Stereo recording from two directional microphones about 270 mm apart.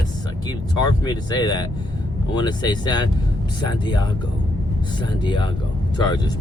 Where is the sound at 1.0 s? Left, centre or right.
Centre.